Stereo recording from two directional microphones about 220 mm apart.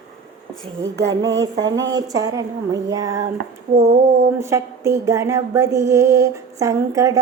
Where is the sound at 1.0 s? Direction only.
55° right (ahead or behind).